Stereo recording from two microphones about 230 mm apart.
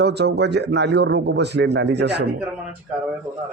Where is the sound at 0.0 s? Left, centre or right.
Right.